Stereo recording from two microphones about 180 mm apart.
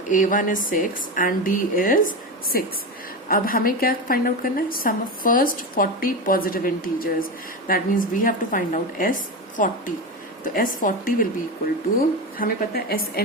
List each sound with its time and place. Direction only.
0.1 s a woman's voice: 45° left (ahead or behind)